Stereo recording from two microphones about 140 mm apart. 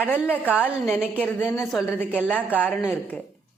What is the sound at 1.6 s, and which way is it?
Speech, centre (ahead or behind).